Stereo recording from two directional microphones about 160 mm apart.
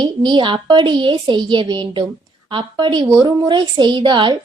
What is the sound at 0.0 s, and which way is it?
A woman's voice, 30° right (ahead or behind).